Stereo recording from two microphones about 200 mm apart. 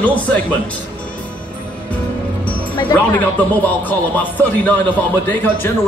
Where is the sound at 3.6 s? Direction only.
10° left (ahead or behind).